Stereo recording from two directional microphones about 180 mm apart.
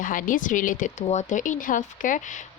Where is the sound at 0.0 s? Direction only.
45° left (ahead or behind).